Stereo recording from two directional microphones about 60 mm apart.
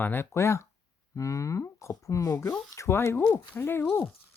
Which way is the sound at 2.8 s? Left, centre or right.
Left.